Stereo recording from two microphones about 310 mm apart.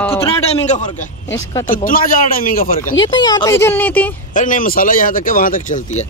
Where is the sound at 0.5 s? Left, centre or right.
Left.